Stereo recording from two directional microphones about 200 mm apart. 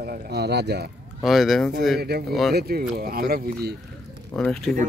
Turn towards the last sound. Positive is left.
turn(degrees=5)  # may be behind; listen again after turning